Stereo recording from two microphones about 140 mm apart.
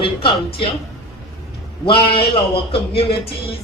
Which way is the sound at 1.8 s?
40° left (ahead or behind).